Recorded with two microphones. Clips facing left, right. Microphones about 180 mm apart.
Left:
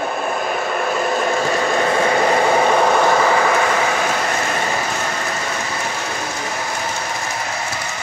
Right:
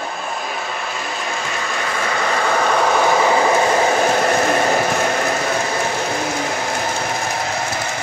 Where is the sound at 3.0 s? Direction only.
10° right (ahead or behind); by 4.3 s 35° right (ahead or behind).